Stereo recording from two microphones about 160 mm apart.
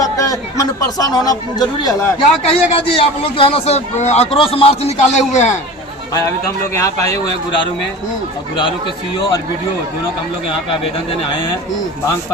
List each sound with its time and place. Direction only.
0.0 s speech: 20° left (ahead or behind)
2.1 s a man's voice: 35° left (ahead or behind)
6.1 s speech: 20° left (ahead or behind)